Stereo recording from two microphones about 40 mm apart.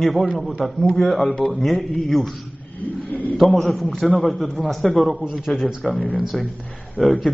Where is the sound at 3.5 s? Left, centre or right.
Centre.